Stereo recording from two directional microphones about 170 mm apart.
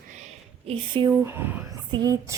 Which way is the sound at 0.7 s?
30° right (ahead or behind).